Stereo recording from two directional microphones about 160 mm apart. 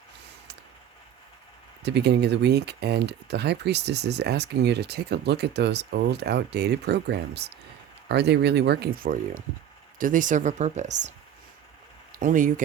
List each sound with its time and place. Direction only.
1.8 s speech: 90° right; by 11.1 s 50° right (ahead or behind)
12.2 s speech: 55° right (ahead or behind)